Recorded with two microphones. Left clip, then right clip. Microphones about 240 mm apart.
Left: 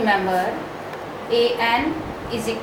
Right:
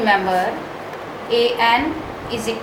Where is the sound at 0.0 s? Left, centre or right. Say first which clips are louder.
Right 3 dB; centre.